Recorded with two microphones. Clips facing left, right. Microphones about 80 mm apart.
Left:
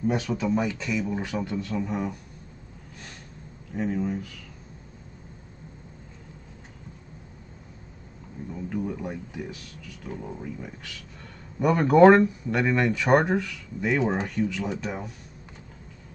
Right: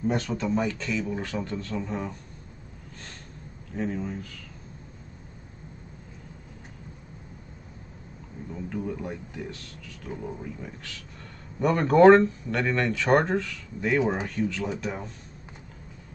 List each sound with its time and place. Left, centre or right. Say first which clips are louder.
0.0 s speech: left 1 dB; centre
3.7 s speech: left 3 dB; centre
8.5 s speech: left 2 dB; centre